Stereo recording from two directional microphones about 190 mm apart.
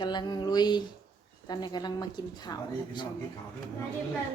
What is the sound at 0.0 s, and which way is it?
Speech, 25° left (ahead or behind).